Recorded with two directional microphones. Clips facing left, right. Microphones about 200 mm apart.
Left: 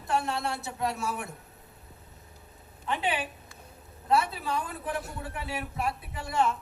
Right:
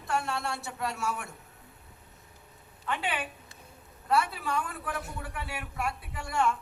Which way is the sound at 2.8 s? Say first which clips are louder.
Left 3 dB; 20° left (ahead or behind).